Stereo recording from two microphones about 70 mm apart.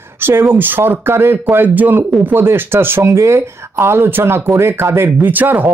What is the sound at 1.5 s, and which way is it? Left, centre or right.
Speech, right.